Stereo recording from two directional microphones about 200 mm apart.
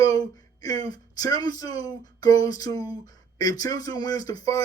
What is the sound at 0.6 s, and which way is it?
Speech, 20° left (ahead or behind).